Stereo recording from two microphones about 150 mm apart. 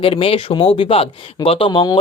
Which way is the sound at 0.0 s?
40° left (ahead or behind).